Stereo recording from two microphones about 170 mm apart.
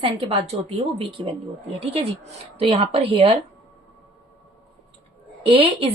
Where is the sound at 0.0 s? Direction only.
30° right (ahead or behind).